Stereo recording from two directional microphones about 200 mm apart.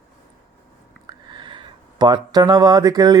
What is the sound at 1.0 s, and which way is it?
Speech, 20° right (ahead or behind).